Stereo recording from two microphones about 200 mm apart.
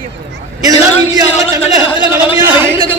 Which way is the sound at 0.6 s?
20° right (ahead or behind).